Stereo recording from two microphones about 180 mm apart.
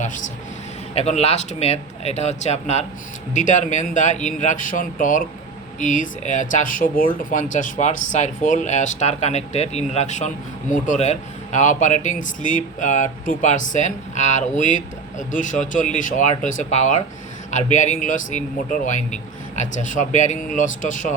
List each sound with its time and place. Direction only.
0.9 s speech: 35° left (ahead or behind)